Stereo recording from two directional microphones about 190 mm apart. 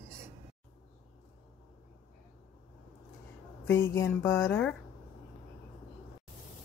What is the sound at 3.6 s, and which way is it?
A woman's voice, 15° left (ahead or behind).